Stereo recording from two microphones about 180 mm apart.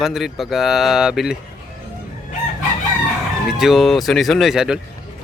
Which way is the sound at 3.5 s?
Centre (ahead or behind).